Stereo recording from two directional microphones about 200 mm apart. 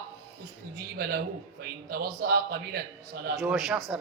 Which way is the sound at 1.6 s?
50° right (ahead or behind).